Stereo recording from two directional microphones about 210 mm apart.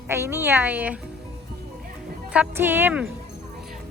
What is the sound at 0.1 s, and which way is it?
Speech, 10° right (ahead or behind).